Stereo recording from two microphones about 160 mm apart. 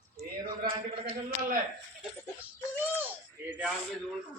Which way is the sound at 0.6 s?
60° right (ahead or behind).